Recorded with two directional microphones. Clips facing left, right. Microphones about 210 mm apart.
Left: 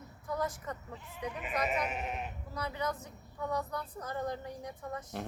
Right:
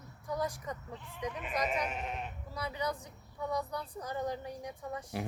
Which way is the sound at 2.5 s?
15° right (ahead or behind).